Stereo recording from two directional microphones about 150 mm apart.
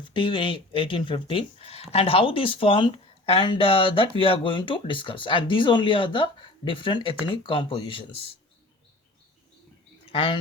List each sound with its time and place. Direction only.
0.0 s speech: 35° left (ahead or behind)
10.1 s speech: 40° left (ahead or behind)